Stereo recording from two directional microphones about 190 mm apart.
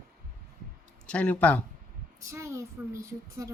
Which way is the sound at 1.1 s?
5° left (ahead or behind).